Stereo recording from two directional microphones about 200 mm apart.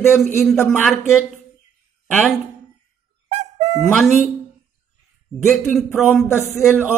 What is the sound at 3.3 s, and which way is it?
Music, 35° right (ahead or behind).